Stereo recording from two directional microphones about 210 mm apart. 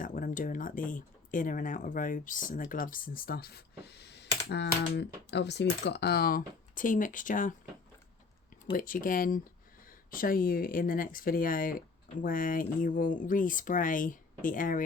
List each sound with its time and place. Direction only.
0.0 s speech: 40° left (ahead or behind)
8.7 s speech: 40° left (ahead or behind)